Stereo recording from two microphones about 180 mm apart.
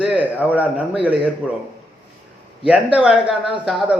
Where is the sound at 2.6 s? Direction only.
5° right (ahead or behind).